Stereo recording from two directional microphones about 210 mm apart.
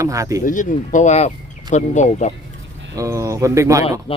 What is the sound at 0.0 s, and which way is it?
Speech, 15° right (ahead or behind).